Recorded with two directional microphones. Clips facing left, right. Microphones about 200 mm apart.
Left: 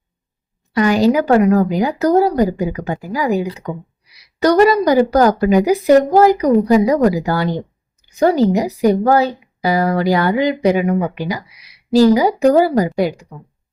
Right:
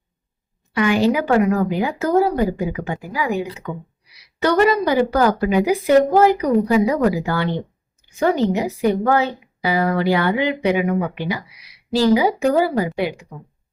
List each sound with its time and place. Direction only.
0.7 s a woman's voice: 40° left (ahead or behind)